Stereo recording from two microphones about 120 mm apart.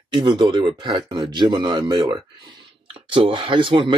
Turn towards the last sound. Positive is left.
turn(degrees=-45)  # may be behind; listen again after turning